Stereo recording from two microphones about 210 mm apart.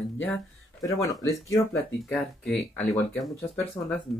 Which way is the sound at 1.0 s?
15° left (ahead or behind).